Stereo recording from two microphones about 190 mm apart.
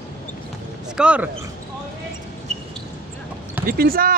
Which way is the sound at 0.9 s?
5° right (ahead or behind).